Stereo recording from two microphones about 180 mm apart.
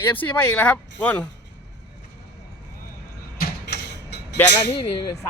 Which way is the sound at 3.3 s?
60° left (ahead or behind).